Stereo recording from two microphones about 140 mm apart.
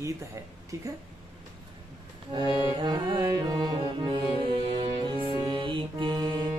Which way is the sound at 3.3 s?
30° right (ahead or behind).